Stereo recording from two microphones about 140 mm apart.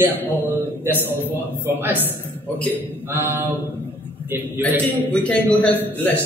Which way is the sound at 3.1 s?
15° right (ahead or behind).